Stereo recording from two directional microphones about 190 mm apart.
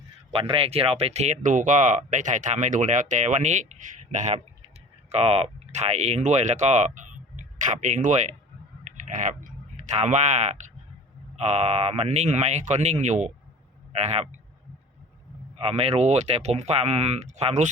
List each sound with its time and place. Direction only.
0.3 s speech: 30° right (ahead or behind)
15.5 s speech: 30° right (ahead or behind)